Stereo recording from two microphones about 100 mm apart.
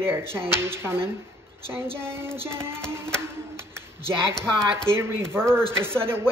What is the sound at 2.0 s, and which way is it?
Speech, 25° right (ahead or behind).